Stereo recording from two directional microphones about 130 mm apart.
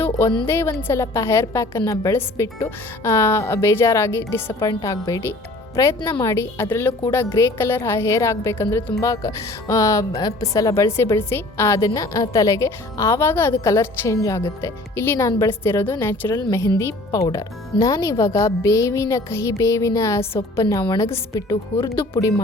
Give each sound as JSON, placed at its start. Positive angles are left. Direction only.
{"t": 0.4, "sound": "a woman's voice", "side_deg": 20}